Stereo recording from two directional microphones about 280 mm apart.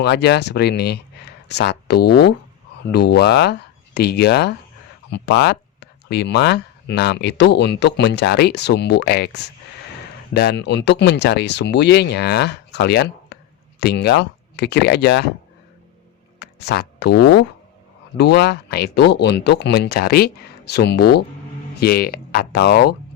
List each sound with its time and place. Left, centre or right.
0.0 s speech: left
16.4 s speech: left